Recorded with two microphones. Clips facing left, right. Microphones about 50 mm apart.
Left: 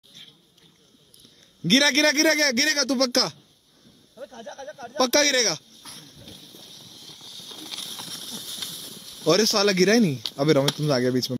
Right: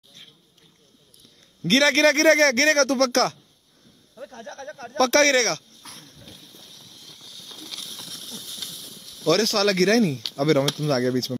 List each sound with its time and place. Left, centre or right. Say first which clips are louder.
1.7 s a man's voice: right 2 dB; centre; by 3.3 s right
4.2 s a sound: even; right
4.6 s a sound: right 2 dB; right
4.9 s speech: right 3 dB; right
7.8 s horse: left 1 dB; left
9.2 s speech: even; centre